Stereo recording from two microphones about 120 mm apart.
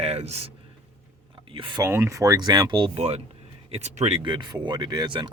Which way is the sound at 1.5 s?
45° right (ahead or behind).